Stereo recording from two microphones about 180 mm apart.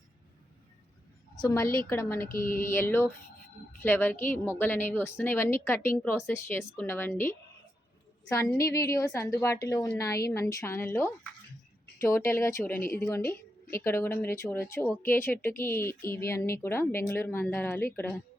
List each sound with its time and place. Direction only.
1.4 s a woman's voice: 20° left (ahead or behind)
8.5 s a woman's voice: 15° left (ahead or behind)